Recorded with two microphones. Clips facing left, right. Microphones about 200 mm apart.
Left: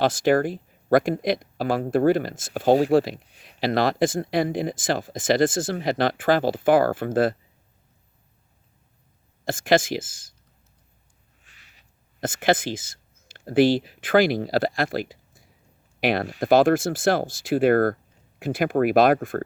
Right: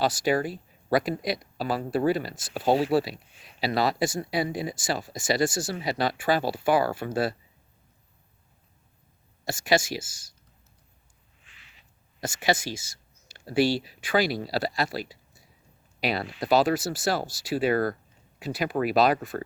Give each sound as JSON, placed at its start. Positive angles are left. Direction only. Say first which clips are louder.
{"t": 0.0, "sound": "speech", "louder": "left 5 dB", "side_deg": 50}
{"t": 9.4, "sound": "speech", "louder": "left 4 dB", "side_deg": 50}
{"t": 11.4, "sound": "a sound", "louder": "right 1 dB", "side_deg": 40}
{"t": 16.0, "sound": "speech", "louder": "left 5 dB", "side_deg": 50}